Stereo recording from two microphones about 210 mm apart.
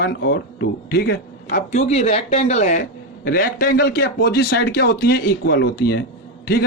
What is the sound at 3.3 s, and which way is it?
A man's voice, 45° left (ahead or behind).